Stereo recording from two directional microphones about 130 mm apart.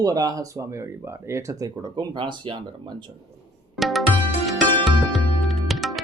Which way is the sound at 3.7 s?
Centre (ahead or behind).